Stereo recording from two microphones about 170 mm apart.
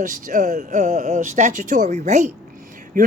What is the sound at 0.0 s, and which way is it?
Speech, 50° right (ahead or behind).